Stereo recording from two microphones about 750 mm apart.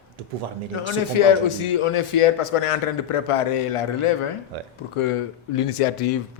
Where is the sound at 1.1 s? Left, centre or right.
Left.